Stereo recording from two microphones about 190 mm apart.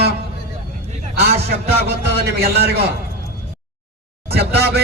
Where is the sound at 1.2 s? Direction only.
55° right (ahead or behind).